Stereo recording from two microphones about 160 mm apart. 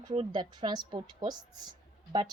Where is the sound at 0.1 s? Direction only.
30° right (ahead or behind).